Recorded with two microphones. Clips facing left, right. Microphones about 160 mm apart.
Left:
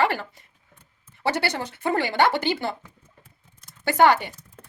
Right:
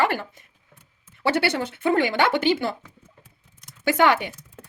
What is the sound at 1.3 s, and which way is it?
Speech, 60° right (ahead or behind).